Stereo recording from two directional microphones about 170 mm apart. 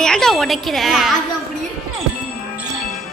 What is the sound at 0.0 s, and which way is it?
A woman's voice, 5° left (ahead or behind).